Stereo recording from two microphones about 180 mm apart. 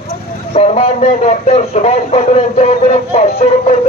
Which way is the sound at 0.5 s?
35° left (ahead or behind).